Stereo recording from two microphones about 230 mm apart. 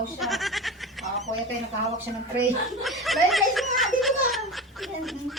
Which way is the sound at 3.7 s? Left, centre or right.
Centre.